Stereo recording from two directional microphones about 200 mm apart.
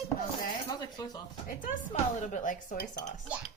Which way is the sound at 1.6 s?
40° left (ahead or behind).